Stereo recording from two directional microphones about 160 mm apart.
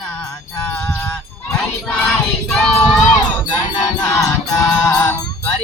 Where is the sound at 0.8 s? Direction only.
15° left (ahead or behind).